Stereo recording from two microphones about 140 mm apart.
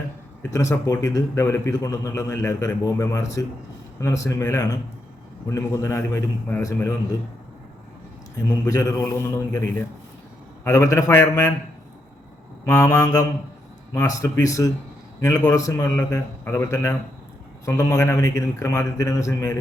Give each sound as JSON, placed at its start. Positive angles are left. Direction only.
{"t": 0.5, "sound": "a man's voice", "side_deg": 20}
{"t": 8.6, "sound": "a man's voice", "side_deg": 20}
{"t": 12.6, "sound": "a man's voice", "side_deg": 20}